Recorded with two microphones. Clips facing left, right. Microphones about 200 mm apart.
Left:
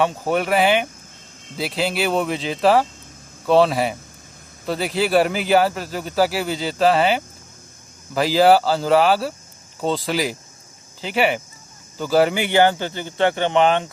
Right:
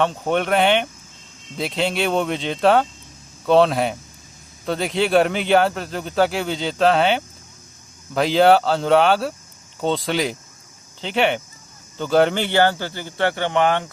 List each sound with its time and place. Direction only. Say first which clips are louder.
0.0 s speech: even; 5° left (ahead or behind)